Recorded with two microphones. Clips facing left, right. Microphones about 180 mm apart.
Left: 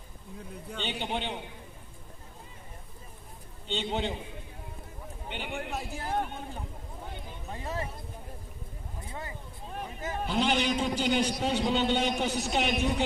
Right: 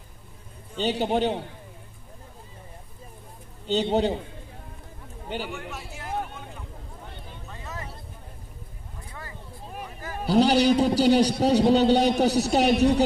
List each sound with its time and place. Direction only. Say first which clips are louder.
0.7 s a man's voice: right 10 dB; 40° right (ahead or behind)
3.6 s a man's voice: right 9 dB; 40° right (ahead or behind)
5.3 s a man's voice: right 6 dB; 40° right (ahead or behind)
5.7 s speech: left 2 dB; 35° left (ahead or behind)
7.4 s a sound: left 4 dB; 30° left (ahead or behind)
10.2 s a man's voice: right 9 dB; 40° right (ahead or behind)